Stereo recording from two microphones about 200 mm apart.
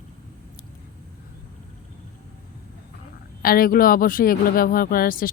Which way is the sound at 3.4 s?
45° left (ahead or behind).